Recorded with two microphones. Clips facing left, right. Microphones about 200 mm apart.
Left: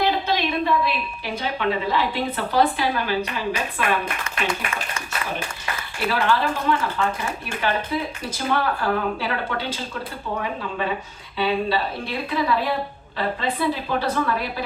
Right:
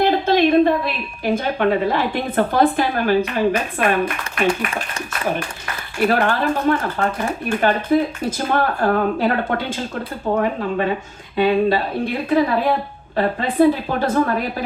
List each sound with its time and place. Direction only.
0.0 s a woman's voice: 50° right (ahead or behind)
6.1 s speech: 50° right (ahead or behind)